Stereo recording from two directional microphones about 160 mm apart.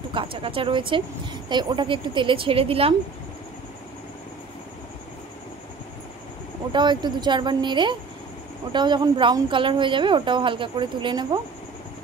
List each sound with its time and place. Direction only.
0.1 s speech: 35° right (ahead or behind)
6.7 s speech: 30° right (ahead or behind)